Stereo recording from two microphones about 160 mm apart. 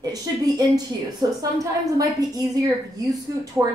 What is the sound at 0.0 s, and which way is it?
A woman's voice, 25° right (ahead or behind).